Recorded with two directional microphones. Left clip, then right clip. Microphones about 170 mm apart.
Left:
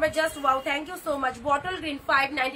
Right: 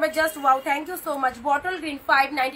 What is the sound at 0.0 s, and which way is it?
A woman's voice, 20° left (ahead or behind).